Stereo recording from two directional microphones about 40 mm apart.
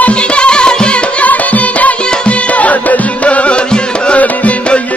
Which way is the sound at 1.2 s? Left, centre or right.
Left.